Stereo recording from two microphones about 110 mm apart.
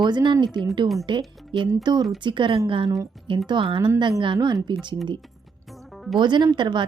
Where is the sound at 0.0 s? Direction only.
40° right (ahead or behind).